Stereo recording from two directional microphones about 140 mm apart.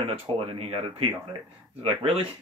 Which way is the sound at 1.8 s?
45° right (ahead or behind).